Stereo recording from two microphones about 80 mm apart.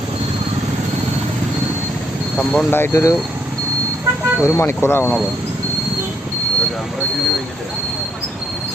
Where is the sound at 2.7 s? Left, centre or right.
Left.